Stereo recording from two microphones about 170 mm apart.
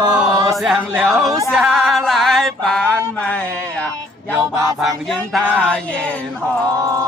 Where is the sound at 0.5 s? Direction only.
Centre (ahead or behind).